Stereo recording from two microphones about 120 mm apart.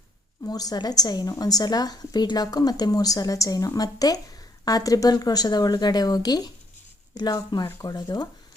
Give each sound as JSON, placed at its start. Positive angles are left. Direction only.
{"t": 0.4, "sound": "a woman's voice", "side_deg": 30}